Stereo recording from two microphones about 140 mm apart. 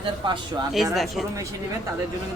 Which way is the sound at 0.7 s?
Centre (ahead or behind).